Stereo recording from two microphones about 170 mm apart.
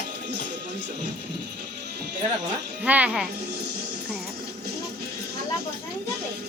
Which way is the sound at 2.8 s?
10° right (ahead or behind).